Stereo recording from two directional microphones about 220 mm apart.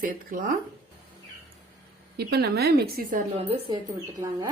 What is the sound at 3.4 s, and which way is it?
Speech, 25° right (ahead or behind).